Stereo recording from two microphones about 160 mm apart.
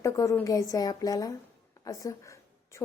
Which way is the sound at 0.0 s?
20° left (ahead or behind).